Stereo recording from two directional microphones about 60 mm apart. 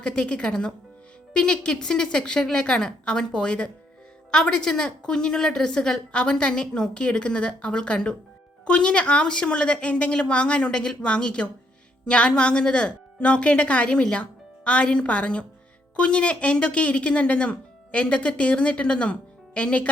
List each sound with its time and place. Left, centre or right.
0.0 s speech: centre